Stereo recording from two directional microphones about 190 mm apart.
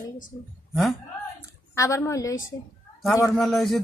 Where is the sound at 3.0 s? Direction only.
Centre (ahead or behind).